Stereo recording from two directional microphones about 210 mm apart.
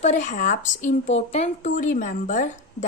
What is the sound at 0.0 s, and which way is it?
A woman's voice, 35° left (ahead or behind).